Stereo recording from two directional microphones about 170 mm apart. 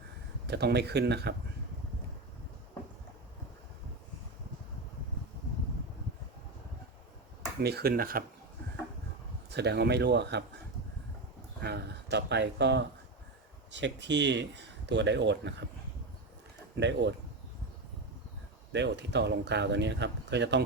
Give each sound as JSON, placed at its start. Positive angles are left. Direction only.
{"t": 0.4, "sound": "speech", "side_deg": -75}
{"t": 7.6, "sound": "speech", "side_deg": -70}
{"t": 9.5, "sound": "speech", "side_deg": -80}
{"t": 11.6, "sound": "speech", "side_deg": -80}
{"t": 16.7, "sound": "speech", "side_deg": -90}
{"t": 18.7, "sound": "speech", "side_deg": -90}